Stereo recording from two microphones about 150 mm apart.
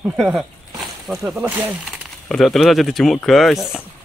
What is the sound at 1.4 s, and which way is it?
Speech, 10° right (ahead or behind).